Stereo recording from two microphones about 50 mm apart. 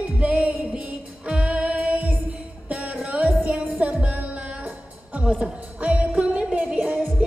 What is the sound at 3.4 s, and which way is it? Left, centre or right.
Music, centre.